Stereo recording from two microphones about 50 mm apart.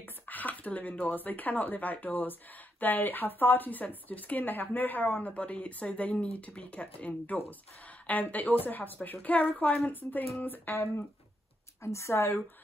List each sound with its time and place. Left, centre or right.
0.0 s speech: left
5.3 s speech: left
11.8 s speech: left